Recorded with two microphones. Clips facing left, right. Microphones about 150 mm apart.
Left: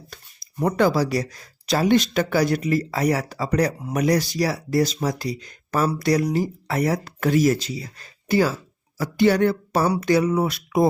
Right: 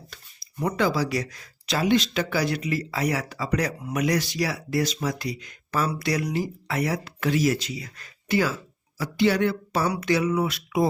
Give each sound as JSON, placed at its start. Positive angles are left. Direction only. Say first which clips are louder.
{"t": 0.6, "sound": "speech", "louder": "left 5 dB", "side_deg": 45}
{"t": 9.0, "sound": "a sound", "louder": "left 4 dB", "side_deg": 45}
{"t": 9.9, "sound": "speech", "louder": "left 4 dB", "side_deg": 40}